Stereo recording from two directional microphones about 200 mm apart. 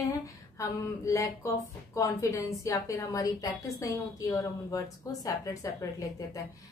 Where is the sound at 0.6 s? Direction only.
15° left (ahead or behind).